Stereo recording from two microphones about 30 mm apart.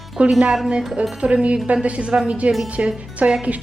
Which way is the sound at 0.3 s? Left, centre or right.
Right.